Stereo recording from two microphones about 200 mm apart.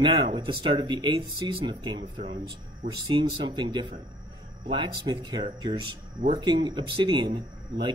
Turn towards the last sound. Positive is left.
turn(degrees=-20)  # may be behind; listen again after turning